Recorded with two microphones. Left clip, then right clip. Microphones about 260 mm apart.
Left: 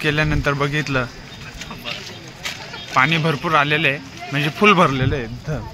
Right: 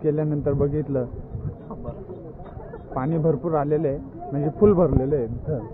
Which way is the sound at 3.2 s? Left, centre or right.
Left.